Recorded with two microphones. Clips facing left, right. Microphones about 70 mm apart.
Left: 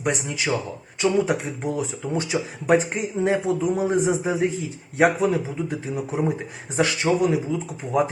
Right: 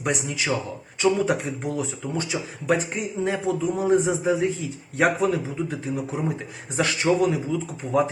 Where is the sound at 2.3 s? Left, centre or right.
Left.